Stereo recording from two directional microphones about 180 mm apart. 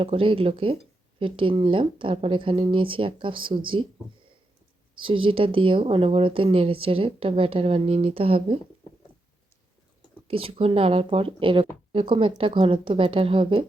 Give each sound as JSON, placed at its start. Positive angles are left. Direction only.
{"t": 0.0, "sound": "speech", "side_deg": -30}
{"t": 4.9, "sound": "speech", "side_deg": -30}
{"t": 10.2, "sound": "speech", "side_deg": -30}